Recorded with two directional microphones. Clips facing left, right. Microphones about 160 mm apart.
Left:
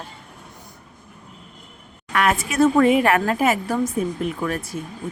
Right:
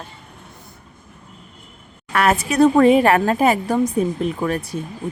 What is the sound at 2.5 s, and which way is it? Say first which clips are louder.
Speech: right 3 dB; 35° right (ahead or behind).